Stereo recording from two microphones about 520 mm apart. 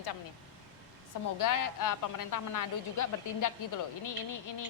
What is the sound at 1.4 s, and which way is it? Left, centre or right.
Speech, left.